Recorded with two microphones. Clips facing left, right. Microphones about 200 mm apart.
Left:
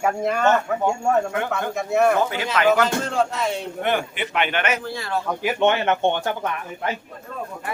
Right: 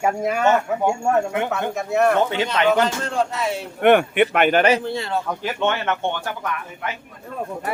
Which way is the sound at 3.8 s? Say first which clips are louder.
Right 11 dB; 60° right (ahead or behind).